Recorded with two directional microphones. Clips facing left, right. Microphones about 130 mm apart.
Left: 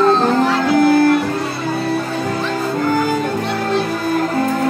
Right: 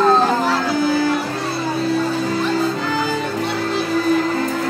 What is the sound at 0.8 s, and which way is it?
Music, 55° left (ahead or behind).